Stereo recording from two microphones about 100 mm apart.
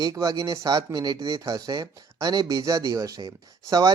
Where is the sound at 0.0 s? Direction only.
35° right (ahead or behind).